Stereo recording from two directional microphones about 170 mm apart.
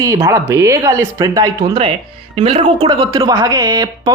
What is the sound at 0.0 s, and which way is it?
Speech, 15° right (ahead or behind).